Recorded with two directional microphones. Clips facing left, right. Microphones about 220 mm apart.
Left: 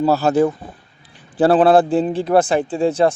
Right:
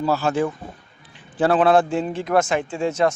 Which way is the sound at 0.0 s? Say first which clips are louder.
Left 6 dB; 40° left (ahead or behind).